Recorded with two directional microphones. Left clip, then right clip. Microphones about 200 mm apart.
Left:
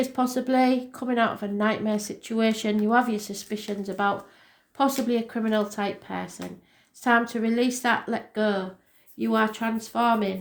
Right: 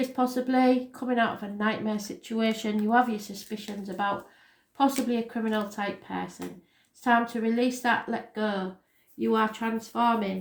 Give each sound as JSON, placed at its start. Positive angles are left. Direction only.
{"t": 0.0, "sound": "speech", "side_deg": 40}